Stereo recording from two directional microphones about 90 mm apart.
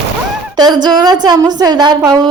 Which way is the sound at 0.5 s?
50° right (ahead or behind).